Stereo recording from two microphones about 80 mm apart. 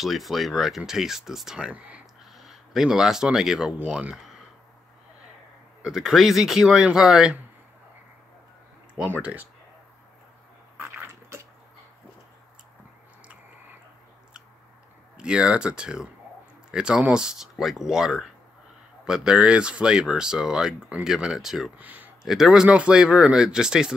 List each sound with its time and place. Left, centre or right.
0.0 s speech: centre
2.3 s speech: centre
5.8 s speech: centre
8.9 s speech: centre
15.1 s speech: centre
21.7 s speech: right
22.2 s speech: centre